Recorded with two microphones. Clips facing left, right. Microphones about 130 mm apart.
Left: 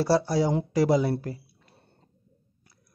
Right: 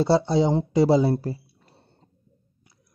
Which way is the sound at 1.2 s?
30° right (ahead or behind).